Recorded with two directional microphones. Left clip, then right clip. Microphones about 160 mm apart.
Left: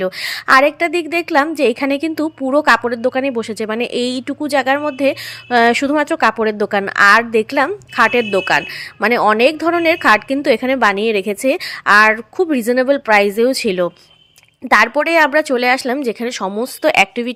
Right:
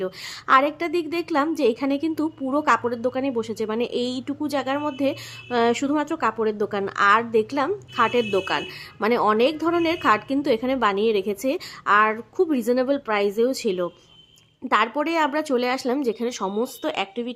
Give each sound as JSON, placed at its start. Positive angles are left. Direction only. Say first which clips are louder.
{"t": 0.0, "sound": "a woman's voice", "louder": "left 10 dB", "side_deg": 30}